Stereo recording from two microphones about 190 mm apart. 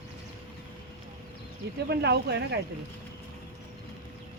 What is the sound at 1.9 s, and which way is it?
Speech, 60° right (ahead or behind).